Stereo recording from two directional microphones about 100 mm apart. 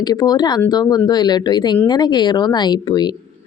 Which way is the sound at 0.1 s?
45° left (ahead or behind).